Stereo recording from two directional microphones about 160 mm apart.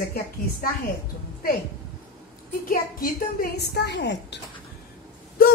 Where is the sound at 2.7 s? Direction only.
65° left (ahead or behind); by 4.4 s 90° left.